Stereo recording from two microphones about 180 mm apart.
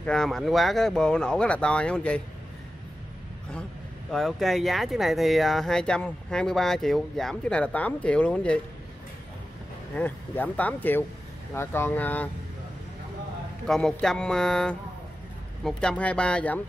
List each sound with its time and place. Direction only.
0.0 s speech: 5° left (ahead or behind)
4.1 s speech: centre (ahead or behind)
9.9 s speech: 10° left (ahead or behind)
13.7 s speech: centre (ahead or behind)